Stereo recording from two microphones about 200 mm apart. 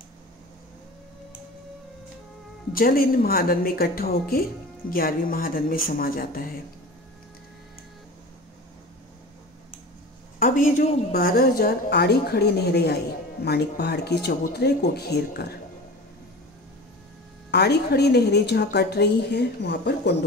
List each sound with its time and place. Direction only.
2.7 s a woman's voice: 45° left (ahead or behind)
10.4 s a woman's voice: 45° left (ahead or behind)
17.5 s a woman's voice: 55° left (ahead or behind)